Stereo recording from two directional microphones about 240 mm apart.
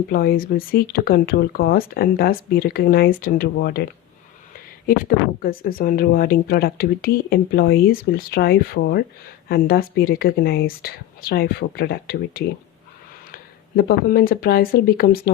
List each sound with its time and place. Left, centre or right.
0.1 s speech: left
4.9 s speech: left